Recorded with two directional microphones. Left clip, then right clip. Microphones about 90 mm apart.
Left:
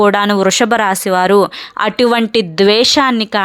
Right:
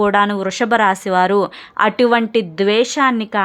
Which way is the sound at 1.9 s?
35° left (ahead or behind).